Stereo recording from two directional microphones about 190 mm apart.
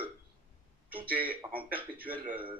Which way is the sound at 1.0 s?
10° right (ahead or behind).